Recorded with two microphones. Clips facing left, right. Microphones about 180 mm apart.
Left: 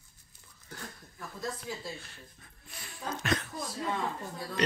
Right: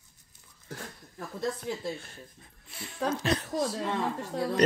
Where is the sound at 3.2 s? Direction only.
35° right (ahead or behind).